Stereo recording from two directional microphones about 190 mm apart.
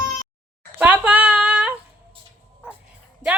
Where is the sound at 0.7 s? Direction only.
10° right (ahead or behind).